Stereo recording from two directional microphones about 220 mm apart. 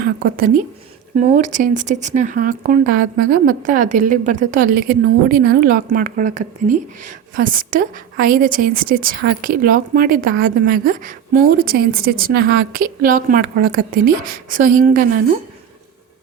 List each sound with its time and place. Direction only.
0.0 s a woman's voice: 40° right (ahead or behind)